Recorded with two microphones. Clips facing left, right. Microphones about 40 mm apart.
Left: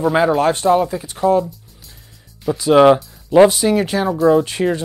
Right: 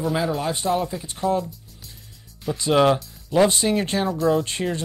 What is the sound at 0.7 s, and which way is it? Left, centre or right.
Speech, centre.